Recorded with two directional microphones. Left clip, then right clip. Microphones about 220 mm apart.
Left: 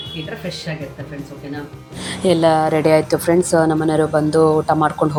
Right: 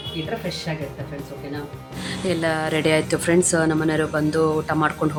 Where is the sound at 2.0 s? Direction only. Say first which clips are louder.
Left 8 dB; 30° left (ahead or behind).